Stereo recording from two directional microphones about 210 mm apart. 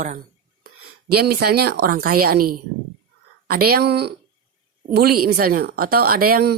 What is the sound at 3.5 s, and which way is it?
Speech, 45° right (ahead or behind).